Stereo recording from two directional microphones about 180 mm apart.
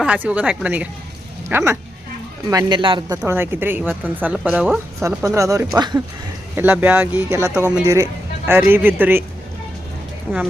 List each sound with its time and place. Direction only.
0.0 s a woman's voice: 5° right (ahead or behind); by 3.2 s 25° right (ahead or behind)
3.2 s a woman's voice: 10° right (ahead or behind)
5.0 s a woman's voice: 15° right (ahead or behind)
6.6 s a woman's voice: 10° right (ahead or behind)